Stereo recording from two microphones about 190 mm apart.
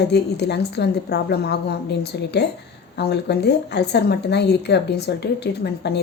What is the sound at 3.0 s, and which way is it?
A woman's voice, 60° left (ahead or behind).